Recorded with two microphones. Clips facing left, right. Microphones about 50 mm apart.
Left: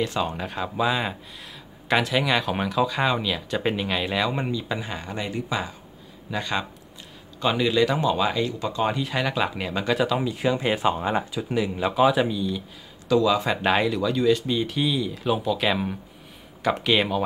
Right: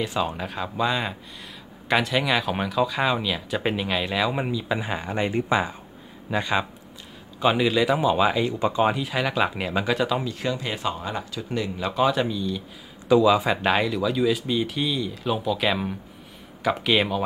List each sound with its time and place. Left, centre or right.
0.0 s speech: centre; by 5.8 s right
6.3 s speech: centre
8.8 s speech: centre
10.2 s speech: centre
11.3 s speech: centre
13.1 s speech: centre
13.6 s speech: centre